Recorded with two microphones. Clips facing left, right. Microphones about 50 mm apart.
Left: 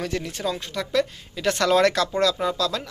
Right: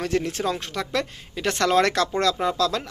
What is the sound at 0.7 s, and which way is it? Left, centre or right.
A woman's voice, right.